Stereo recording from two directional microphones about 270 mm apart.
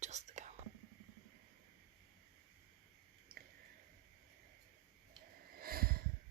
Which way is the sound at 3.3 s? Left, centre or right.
Right.